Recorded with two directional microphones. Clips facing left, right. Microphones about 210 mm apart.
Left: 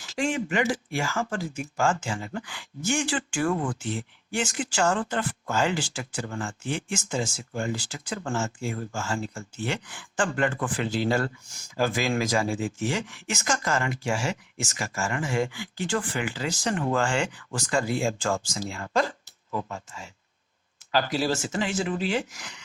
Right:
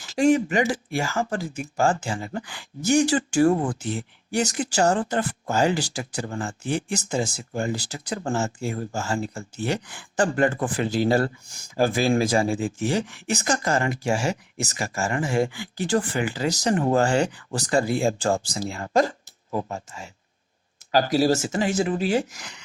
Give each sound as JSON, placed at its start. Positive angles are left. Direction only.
{"t": 0.0, "sound": "speech", "side_deg": -40}